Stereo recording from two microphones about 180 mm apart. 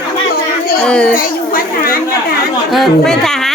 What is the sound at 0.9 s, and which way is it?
Speech, 5° left (ahead or behind).